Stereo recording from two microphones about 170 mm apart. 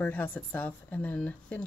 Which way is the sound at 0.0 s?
10° left (ahead or behind).